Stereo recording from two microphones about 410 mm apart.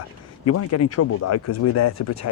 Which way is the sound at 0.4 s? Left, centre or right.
Left.